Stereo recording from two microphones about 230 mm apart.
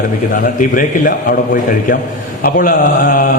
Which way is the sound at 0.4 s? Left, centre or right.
Left.